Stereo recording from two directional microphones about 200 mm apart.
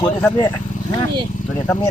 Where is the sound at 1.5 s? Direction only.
15° left (ahead or behind).